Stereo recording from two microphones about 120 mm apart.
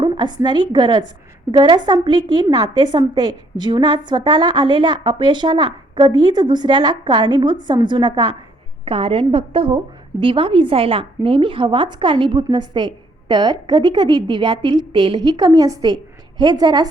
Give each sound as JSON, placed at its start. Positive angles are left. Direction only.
{"t": 0.0, "sound": "a woman's voice", "side_deg": -40}
{"t": 8.8, "sound": "a woman's voice", "side_deg": -50}